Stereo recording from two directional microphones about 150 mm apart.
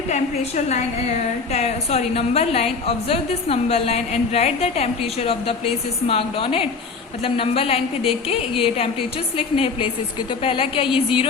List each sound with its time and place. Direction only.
0.1 s a woman's voice: 50° left (ahead or behind)